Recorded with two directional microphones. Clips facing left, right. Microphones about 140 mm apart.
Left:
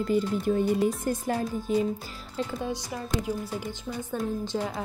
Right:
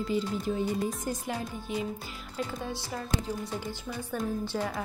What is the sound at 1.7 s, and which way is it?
Speech, 40° left (ahead or behind).